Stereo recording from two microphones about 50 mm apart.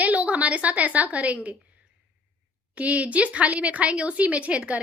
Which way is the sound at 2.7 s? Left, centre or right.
Right.